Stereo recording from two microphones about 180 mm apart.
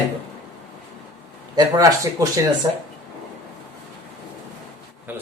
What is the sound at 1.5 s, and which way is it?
Speech, 20° right (ahead or behind).